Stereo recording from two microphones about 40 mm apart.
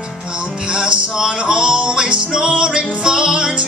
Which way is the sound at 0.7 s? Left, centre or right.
Right.